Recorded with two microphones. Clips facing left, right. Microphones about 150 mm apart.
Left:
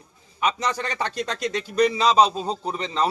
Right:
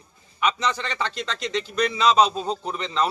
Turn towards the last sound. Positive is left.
turn(degrees=35)  # may be behind; listen again after turning